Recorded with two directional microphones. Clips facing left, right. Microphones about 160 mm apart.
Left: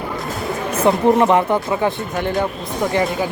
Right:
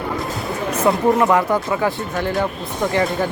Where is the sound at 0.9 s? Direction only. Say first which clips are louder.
Left 2 dB; 20° left (ahead or behind).